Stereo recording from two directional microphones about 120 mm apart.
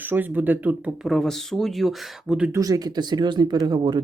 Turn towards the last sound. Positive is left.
turn(degrees=-35)  # may be behind; listen again after turning